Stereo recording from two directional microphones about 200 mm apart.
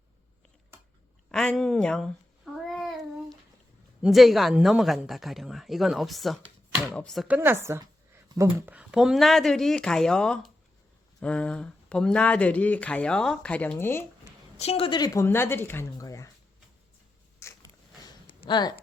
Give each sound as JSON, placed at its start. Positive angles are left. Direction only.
{"t": 1.3, "sound": "babbling", "side_deg": 5}
{"t": 4.0, "sound": "speech", "side_deg": 0}
{"t": 14.6, "sound": "speech", "side_deg": 30}
{"t": 17.4, "sound": "a sound", "side_deg": 20}